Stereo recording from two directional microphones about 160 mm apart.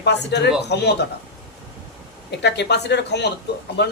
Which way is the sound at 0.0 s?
90° left.